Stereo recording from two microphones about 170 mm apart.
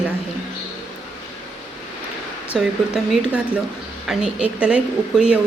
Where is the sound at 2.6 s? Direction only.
5° right (ahead or behind).